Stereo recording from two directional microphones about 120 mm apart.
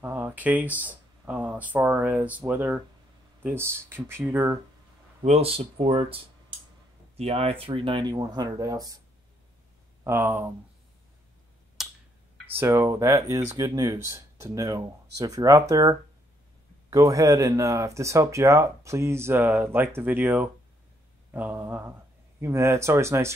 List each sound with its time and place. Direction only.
0.0 s speech: 20° right (ahead or behind)
5.2 s speech: 60° right (ahead or behind)
7.2 s speech: 60° right (ahead or behind); by 9.0 s 30° right (ahead or behind)
10.0 s speech: 20° right (ahead or behind)
11.8 s a sound: 5° right (ahead or behind)
12.5 s speech: 20° right (ahead or behind)